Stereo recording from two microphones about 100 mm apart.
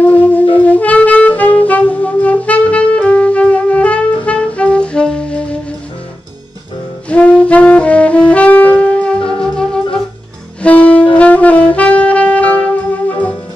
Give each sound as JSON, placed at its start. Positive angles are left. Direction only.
{"t": 0.0, "sound": "music", "side_deg": 15}
{"t": 7.1, "sound": "saxophone", "side_deg": 15}
{"t": 9.3, "sound": "music", "side_deg": 10}
{"t": 10.6, "sound": "saxophone", "side_deg": 15}